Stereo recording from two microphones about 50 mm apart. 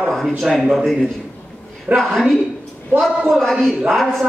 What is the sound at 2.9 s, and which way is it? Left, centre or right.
Speech, right.